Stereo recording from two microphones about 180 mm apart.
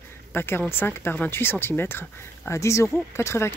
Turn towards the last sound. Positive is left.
turn(degrees=15)  # may be behind; listen again after turning